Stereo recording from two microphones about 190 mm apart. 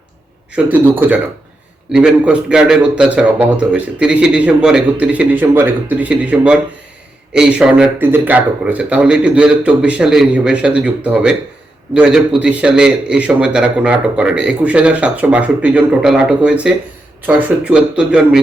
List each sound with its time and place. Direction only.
0.5 s a man's voice: 10° right (ahead or behind)